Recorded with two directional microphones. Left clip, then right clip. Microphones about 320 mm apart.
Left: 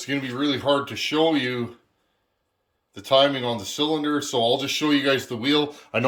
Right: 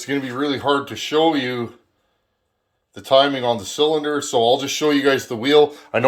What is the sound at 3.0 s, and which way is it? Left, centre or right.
Speech, centre.